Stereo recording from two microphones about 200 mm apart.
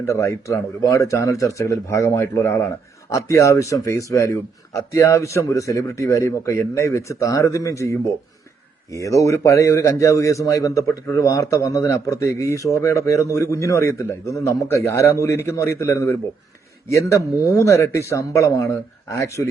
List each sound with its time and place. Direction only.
0.0 s a man's voice: 15° left (ahead or behind)